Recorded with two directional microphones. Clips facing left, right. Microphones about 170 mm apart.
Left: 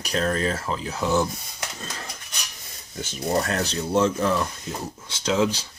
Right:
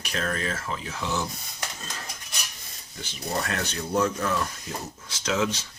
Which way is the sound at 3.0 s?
45° left (ahead or behind).